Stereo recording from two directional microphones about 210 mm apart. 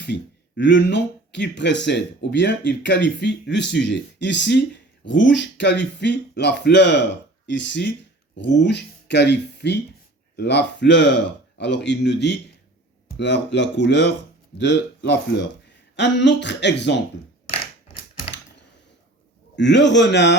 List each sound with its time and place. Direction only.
0.0 s speech: 60° left (ahead or behind)
19.5 s speech: 55° left (ahead or behind)